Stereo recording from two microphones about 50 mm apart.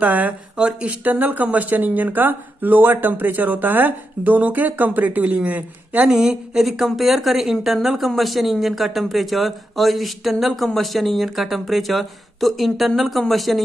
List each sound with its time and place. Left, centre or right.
0.0 s a woman's voice: right
0.6 s speech: centre
0.8 s a woman's voice: right
6.0 s speech: centre